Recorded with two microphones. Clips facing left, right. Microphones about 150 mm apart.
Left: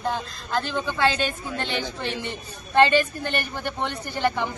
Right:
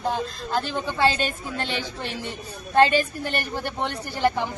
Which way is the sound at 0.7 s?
35° right (ahead or behind).